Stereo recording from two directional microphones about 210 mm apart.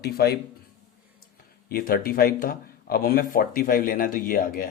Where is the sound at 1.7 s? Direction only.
45° left (ahead or behind).